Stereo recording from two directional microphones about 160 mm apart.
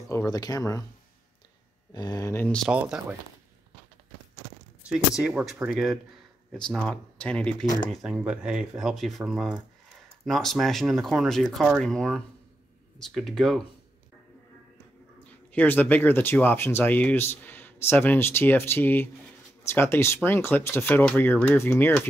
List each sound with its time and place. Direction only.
0.1 s speech: 20° left (ahead or behind)
2.0 s speech: 25° left (ahead or behind)
2.4 s speech: 5° left (ahead or behind)
2.7 s speech: 10° right (ahead or behind)
4.8 s speech: 5° right (ahead or behind)
7.9 s speech: 5° right (ahead or behind)
15.5 s speech: 10° left (ahead or behind)